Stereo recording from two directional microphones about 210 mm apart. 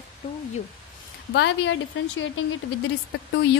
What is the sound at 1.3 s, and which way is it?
Speech, 60° left (ahead or behind).